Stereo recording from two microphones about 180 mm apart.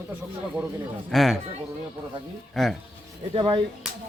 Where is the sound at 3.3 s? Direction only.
30° right (ahead or behind).